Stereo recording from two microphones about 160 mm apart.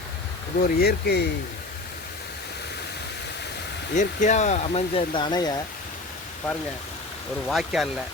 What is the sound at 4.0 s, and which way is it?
Speech, 50° left (ahead or behind).